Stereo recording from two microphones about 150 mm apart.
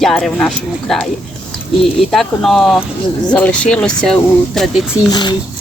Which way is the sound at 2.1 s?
Centre (ahead or behind).